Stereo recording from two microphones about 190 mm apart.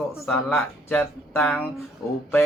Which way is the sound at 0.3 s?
5° left (ahead or behind).